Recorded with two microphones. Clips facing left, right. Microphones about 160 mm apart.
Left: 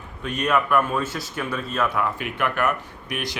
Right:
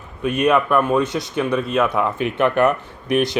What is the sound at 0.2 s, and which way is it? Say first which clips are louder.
Speech: right 6 dB; 20° right (ahead or behind).